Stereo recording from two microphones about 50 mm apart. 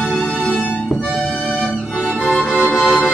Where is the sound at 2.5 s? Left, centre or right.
Left.